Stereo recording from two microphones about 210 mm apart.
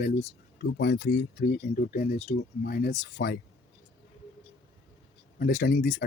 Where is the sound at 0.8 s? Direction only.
55° left (ahead or behind).